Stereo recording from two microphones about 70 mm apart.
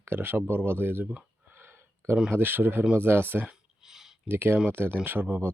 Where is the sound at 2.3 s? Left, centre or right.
Right.